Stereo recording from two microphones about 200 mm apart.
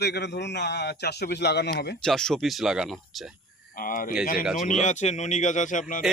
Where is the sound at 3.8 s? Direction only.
45° left (ahead or behind).